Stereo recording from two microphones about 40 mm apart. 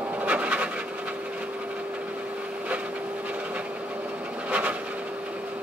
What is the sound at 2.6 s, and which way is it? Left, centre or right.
Wood, right.